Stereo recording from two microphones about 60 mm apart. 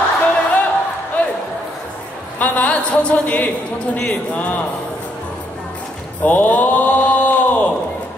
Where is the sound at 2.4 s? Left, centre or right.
Left.